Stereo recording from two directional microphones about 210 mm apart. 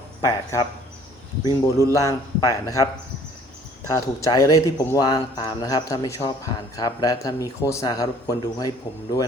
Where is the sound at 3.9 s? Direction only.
15° left (ahead or behind).